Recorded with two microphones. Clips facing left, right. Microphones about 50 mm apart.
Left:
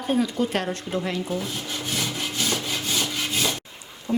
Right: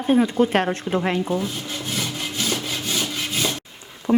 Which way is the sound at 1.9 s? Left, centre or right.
Centre.